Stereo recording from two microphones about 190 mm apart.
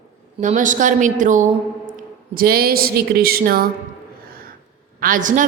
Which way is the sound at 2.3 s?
50° right (ahead or behind).